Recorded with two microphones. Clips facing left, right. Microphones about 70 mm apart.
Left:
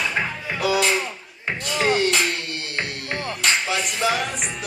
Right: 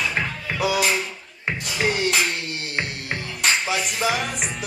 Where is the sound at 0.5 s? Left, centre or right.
Centre.